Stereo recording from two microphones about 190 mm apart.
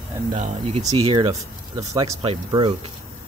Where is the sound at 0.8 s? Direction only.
25° right (ahead or behind).